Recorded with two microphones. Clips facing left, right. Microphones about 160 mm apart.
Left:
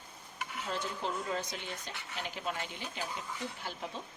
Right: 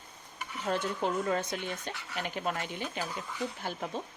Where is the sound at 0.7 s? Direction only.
55° right (ahead or behind).